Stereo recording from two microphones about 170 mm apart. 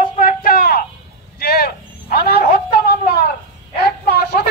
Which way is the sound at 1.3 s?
65° left (ahead or behind).